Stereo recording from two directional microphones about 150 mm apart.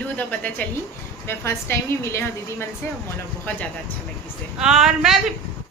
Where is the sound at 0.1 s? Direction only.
10° left (ahead or behind).